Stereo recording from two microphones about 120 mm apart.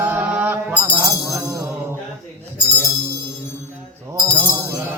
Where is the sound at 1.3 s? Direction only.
25° right (ahead or behind).